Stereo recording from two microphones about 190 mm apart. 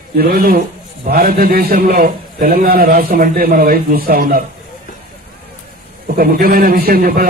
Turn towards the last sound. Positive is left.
turn(degrees=-50)  # may be behind; listen again after turning